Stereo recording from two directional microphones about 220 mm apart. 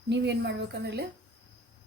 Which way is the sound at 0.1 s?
50° right (ahead or behind).